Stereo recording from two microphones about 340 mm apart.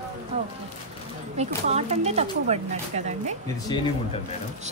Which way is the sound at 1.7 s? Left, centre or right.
Centre.